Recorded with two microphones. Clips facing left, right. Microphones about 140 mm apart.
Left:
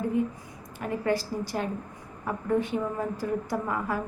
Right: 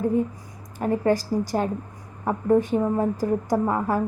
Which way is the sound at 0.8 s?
40° right (ahead or behind).